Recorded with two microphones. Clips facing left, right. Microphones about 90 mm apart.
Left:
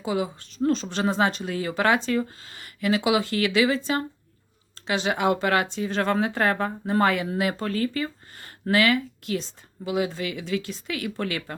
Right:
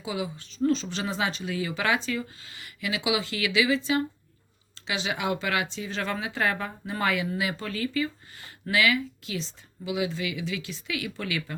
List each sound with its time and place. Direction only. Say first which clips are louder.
0.0 s speech: left 5 dB; 55° left (ahead or behind)